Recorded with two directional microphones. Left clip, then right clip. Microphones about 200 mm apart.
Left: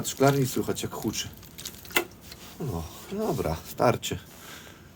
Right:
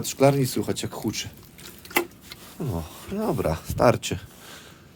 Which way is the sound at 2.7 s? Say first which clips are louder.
Right 2 dB; 30° right (ahead or behind).